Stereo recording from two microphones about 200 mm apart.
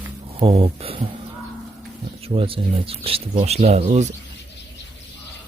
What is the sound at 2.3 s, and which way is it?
Speech, 30° right (ahead or behind).